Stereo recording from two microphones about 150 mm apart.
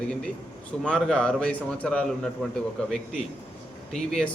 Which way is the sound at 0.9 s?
5° left (ahead or behind).